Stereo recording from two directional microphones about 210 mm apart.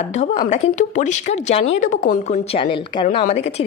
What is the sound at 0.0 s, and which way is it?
A woman's voice, 30° left (ahead or behind).